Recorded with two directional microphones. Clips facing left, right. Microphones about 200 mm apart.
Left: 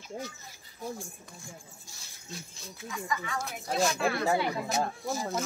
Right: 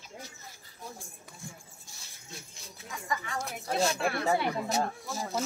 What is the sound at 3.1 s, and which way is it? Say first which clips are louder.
Speech: right 1 dB; 35° right (ahead or behind).